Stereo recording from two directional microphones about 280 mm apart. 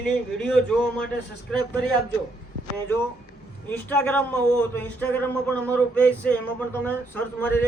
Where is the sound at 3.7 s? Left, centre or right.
Centre.